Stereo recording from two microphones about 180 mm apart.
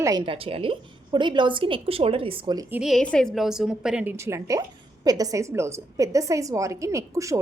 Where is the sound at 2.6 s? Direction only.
10° right (ahead or behind).